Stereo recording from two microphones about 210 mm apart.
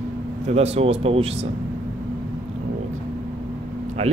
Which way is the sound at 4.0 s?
30° right (ahead or behind).